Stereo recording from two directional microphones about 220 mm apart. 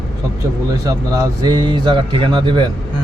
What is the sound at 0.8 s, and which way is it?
Speech, 15° right (ahead or behind).